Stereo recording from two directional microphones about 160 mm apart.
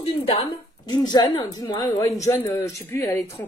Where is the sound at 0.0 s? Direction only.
35° left (ahead or behind).